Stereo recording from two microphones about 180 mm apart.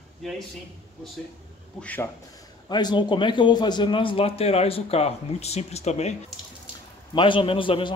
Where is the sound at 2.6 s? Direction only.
25° left (ahead or behind).